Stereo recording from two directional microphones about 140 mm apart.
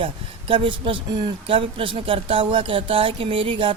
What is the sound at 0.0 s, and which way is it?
Speech, 40° right (ahead or behind).